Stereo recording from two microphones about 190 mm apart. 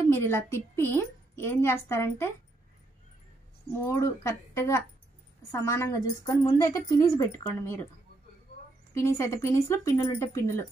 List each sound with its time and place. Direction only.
0.1 s a woman's voice: 10° left (ahead or behind)
3.8 s a woman's voice: 15° left (ahead or behind)
8.9 s a woman's voice: 15° left (ahead or behind)